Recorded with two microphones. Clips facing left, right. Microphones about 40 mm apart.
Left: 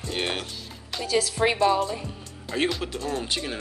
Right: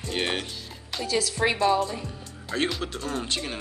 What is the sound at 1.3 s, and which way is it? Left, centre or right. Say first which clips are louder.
Speech: even; centre.